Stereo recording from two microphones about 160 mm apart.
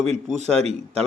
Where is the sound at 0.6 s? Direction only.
40° right (ahead or behind).